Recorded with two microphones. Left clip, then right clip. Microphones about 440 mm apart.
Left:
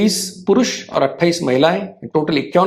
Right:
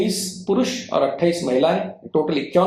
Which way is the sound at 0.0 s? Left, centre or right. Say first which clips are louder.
Left 5 dB; left.